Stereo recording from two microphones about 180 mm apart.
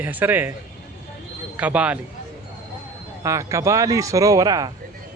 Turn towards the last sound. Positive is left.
turn(degrees=-20)  # may be behind; listen again after turning